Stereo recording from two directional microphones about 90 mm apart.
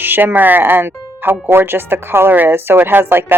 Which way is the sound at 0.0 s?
20° right (ahead or behind).